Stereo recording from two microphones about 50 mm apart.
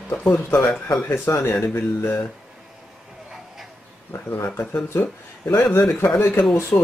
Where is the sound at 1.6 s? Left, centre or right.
Left.